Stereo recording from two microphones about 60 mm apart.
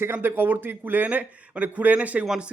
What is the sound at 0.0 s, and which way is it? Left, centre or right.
Speech, right.